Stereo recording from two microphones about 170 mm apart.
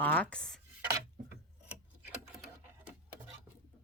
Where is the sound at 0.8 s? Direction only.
15° right (ahead or behind).